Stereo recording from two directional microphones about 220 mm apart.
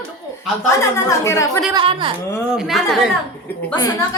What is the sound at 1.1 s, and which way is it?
Speech, 15° left (ahead or behind).